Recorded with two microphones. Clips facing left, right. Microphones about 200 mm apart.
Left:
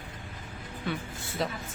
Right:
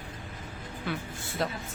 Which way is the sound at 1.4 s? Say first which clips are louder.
Even; centre (ahead or behind).